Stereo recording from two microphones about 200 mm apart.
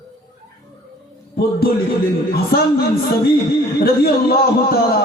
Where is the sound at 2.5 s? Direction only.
50° left (ahead or behind).